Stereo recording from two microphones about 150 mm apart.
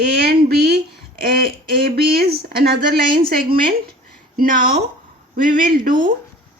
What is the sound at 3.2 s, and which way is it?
Speech, 75° right (ahead or behind).